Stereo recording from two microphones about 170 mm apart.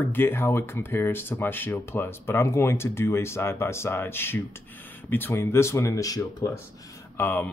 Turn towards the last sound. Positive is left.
turn(degrees=10)  # may be behind; listen again after turning